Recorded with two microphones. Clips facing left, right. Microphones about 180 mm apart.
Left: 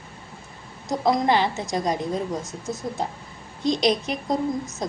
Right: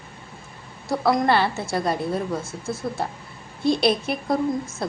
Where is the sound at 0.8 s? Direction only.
20° left (ahead or behind).